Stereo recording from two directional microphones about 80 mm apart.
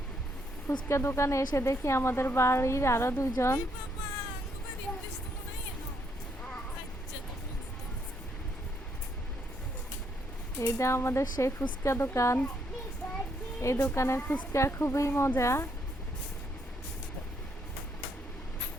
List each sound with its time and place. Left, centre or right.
0.9 s a woman's voice: left
10.6 s a woman's voice: left
11.2 s speech: left
11.8 s a woman's voice: left
13.6 s a woman's voice: left
14.2 s a woman's voice: left
14.5 s a woman's voice: left